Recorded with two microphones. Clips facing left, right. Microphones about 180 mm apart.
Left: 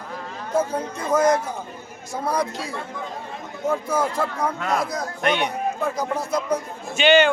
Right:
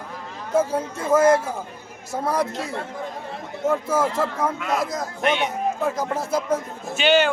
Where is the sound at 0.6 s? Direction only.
5° right (ahead or behind).